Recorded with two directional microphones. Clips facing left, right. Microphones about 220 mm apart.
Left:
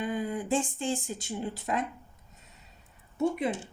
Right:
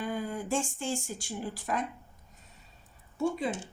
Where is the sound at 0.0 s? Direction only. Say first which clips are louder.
Left 2 dB; 20° left (ahead or behind).